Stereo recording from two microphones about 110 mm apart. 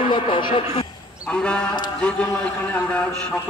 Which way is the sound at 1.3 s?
10° left (ahead or behind).